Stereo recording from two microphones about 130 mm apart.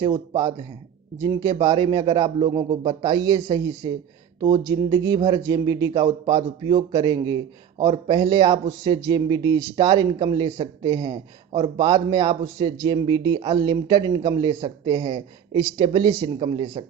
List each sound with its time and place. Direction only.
0.0 s a man's voice: 30° right (ahead or behind)